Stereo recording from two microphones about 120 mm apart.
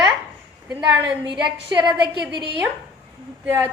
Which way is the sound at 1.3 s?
40° right (ahead or behind).